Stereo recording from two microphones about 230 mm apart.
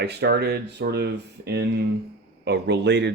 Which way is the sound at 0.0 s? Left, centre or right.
Right.